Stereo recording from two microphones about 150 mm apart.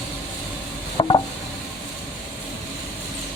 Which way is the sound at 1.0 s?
30° left (ahead or behind).